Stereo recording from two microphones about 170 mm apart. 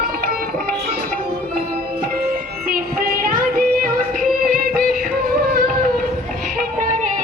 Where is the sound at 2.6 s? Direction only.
60° right (ahead or behind).